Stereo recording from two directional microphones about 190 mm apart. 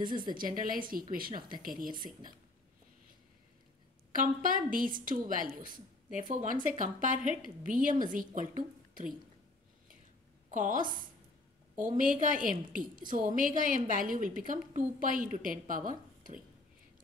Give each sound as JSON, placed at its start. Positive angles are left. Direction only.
{"t": 0.3, "sound": "a woman's voice", "side_deg": -45}
{"t": 4.1, "sound": "a woman's voice", "side_deg": -45}
{"t": 10.5, "sound": "a woman's voice", "side_deg": -45}